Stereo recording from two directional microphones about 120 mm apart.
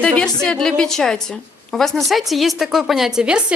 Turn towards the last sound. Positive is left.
turn(degrees=-10)  # may be behind; listen again after turning